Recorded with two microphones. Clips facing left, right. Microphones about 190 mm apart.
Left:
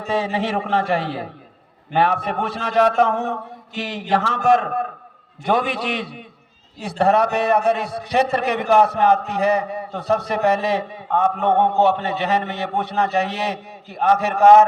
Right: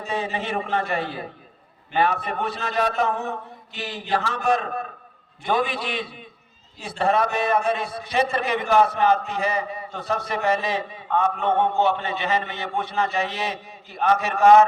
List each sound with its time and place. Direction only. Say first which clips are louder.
0.0 s a man's voice: left 6 dB; 65° left (ahead or behind)
1.9 s a man's voice: left 3 dB; 60° left (ahead or behind)
2.6 s a man's voice: left 8 dB; 75° left (ahead or behind)
2.9 s a man's voice: left 5 dB; 55° left (ahead or behind)